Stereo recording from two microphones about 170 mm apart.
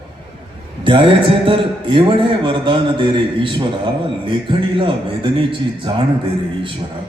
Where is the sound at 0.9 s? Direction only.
30° right (ahead or behind).